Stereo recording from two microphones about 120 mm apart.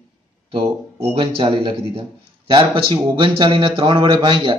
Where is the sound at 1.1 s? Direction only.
50° right (ahead or behind).